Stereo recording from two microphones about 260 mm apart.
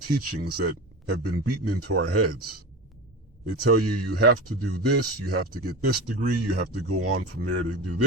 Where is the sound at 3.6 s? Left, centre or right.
Right.